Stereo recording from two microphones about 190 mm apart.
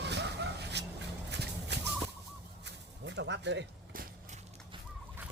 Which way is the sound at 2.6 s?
65° right (ahead or behind).